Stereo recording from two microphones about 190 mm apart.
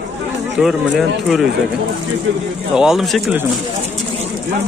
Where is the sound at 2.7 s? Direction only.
5° right (ahead or behind).